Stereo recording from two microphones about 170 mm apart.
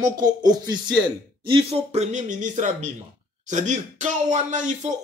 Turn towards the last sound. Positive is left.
turn(degrees=-45)  # may be behind; listen again after turning